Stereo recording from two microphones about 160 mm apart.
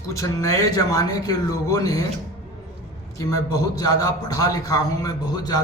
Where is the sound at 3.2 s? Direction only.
20° left (ahead or behind).